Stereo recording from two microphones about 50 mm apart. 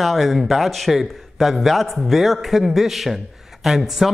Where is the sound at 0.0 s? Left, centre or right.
Centre.